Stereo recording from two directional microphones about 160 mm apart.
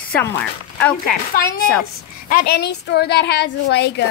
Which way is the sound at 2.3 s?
75° left (ahead or behind).